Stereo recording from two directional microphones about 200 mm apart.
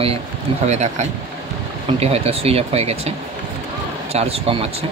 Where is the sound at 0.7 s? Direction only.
35° right (ahead or behind).